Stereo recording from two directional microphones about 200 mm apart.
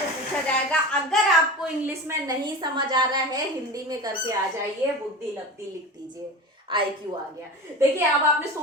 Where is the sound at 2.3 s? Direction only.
20° right (ahead or behind).